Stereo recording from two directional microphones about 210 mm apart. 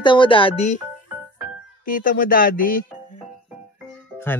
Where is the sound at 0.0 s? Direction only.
20° left (ahead or behind).